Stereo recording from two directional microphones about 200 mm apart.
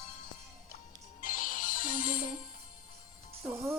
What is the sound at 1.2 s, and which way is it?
Music, 40° left (ahead or behind).